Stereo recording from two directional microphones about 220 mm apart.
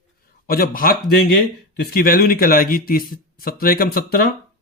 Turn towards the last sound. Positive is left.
turn(degrees=40)  # may be behind; listen again after turning